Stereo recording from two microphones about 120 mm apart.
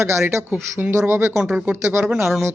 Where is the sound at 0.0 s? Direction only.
20° right (ahead or behind).